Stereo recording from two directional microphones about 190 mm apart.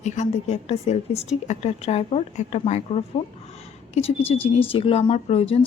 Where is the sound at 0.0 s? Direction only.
35° left (ahead or behind).